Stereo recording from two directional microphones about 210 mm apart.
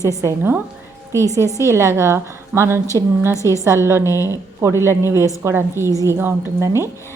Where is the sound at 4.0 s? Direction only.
15° left (ahead or behind).